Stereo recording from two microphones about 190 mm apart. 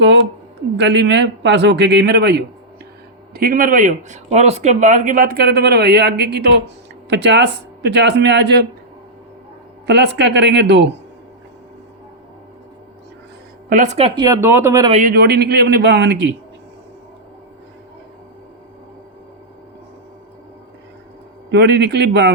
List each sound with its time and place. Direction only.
0.8 s a man's voice: 65° right (ahead or behind)
9.8 s a man's voice: 65° right (ahead or behind)
13.7 s a woman's voice: 40° right (ahead or behind)
14.2 s speech: 15° right (ahead or behind)
15.0 s a man's voice: 60° right (ahead or behind)
21.5 s a man's voice: 65° right (ahead or behind)